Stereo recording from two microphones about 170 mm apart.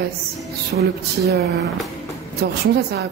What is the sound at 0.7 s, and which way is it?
Music, 70° right (ahead or behind).